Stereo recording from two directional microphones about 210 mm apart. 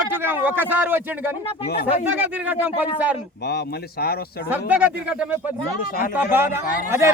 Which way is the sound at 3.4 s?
50° left (ahead or behind).